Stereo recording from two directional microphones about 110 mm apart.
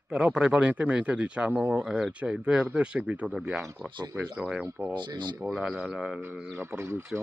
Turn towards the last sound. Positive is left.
turn(degrees=-25)  # may be behind; listen again after turning